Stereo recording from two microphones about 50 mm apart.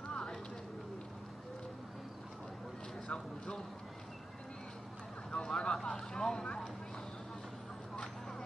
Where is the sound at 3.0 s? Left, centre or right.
Centre.